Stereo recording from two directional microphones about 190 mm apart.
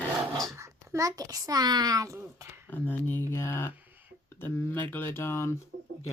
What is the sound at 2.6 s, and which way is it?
Speech, 10° left (ahead or behind).